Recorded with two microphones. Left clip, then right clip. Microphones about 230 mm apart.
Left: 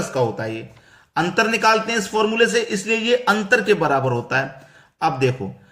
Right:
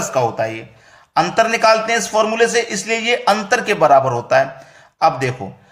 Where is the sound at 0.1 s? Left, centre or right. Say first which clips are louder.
Right 6 dB; centre.